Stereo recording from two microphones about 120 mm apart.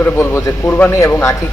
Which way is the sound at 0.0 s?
20° left (ahead or behind).